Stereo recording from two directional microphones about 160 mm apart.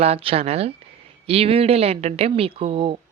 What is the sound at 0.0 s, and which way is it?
A woman's voice, 40° right (ahead or behind).